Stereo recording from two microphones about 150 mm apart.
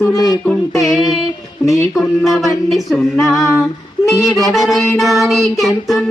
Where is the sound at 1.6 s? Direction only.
20° left (ahead or behind).